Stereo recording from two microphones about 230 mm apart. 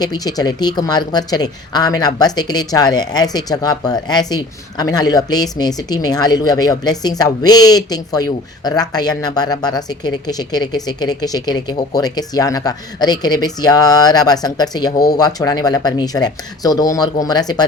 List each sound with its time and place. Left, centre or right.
0.0 s speech: centre